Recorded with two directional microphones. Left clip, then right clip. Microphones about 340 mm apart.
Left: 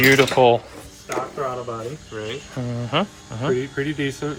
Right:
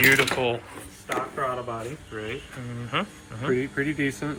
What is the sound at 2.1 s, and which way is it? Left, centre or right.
Speech, centre.